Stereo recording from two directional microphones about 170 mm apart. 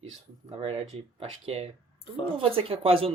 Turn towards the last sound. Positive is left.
turn(degrees=-35)  # may be behind; listen again after turning